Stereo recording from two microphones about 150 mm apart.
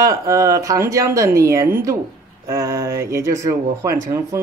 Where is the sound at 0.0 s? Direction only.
20° right (ahead or behind).